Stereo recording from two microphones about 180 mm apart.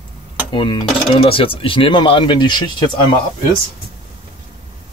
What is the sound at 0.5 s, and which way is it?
Speech, 25° left (ahead or behind).